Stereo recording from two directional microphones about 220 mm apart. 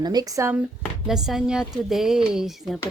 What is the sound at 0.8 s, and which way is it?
A woman's voice, centre (ahead or behind).